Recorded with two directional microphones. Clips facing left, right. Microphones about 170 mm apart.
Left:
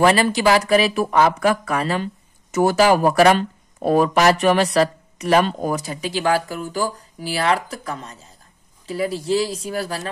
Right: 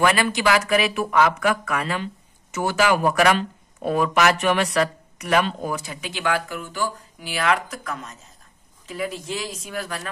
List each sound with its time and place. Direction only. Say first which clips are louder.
0.0 s speech: left 4 dB; 30° left (ahead or behind)